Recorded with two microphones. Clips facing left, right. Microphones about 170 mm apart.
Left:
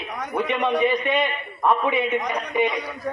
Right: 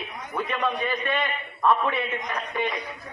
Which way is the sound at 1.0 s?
15° left (ahead or behind).